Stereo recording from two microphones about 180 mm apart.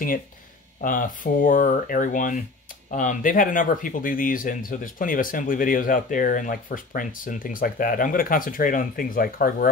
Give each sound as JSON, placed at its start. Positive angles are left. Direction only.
{"t": 0.7, "sound": "speech", "side_deg": 50}